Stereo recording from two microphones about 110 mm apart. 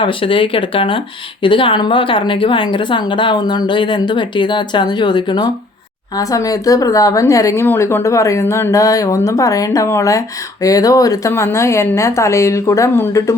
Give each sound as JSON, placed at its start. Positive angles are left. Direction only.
{"t": 0.0, "sound": "speech", "side_deg": 50}
{"t": 6.1, "sound": "speech", "side_deg": 30}